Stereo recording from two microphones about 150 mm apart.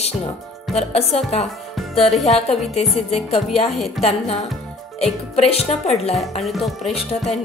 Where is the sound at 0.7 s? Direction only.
45° left (ahead or behind).